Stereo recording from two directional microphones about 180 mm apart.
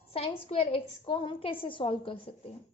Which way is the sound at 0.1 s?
30° left (ahead or behind).